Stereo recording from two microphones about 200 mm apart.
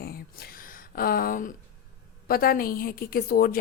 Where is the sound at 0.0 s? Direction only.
50° left (ahead or behind).